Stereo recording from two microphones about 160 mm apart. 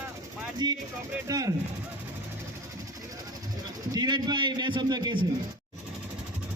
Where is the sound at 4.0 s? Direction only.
25° right (ahead or behind).